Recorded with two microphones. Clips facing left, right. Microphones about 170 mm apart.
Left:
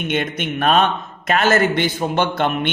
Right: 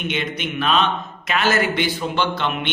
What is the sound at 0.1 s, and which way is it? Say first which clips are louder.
A man's voice: left 4 dB; 50° left (ahead or behind).